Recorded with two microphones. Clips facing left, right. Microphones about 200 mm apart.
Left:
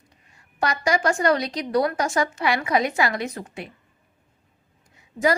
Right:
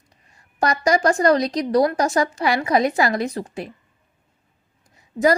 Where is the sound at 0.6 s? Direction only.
40° right (ahead or behind).